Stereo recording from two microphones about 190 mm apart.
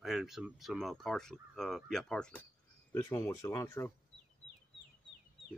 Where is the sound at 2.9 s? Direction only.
15° left (ahead or behind).